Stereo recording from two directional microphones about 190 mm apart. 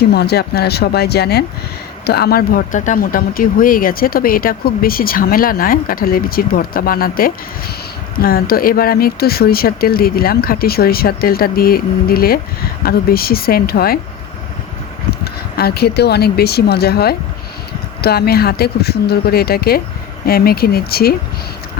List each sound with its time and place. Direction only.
0.1 s speech: 60° left (ahead or behind)
15.2 s speech: 55° left (ahead or behind)